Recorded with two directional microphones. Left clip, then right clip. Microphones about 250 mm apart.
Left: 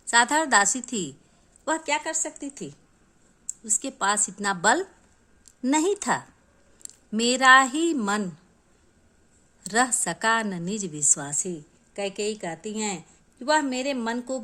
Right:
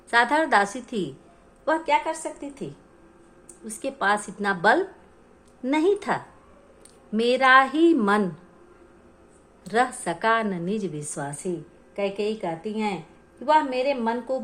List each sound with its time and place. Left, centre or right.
0.1 s a woman's voice: left
9.6 s a woman's voice: left